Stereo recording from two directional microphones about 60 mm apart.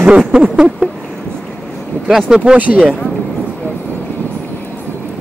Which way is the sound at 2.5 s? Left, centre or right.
Right.